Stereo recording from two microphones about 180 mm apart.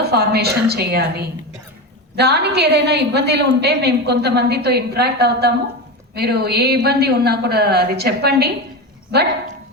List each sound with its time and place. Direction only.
0.0 s a woman's voice: 65° right (ahead or behind)